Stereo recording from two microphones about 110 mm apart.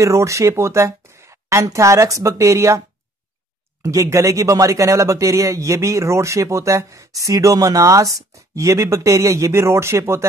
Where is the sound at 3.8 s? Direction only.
30° right (ahead or behind).